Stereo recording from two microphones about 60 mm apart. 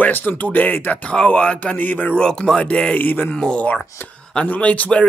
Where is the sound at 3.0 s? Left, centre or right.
Left.